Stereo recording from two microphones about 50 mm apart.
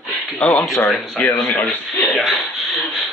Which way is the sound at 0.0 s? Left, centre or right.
Centre.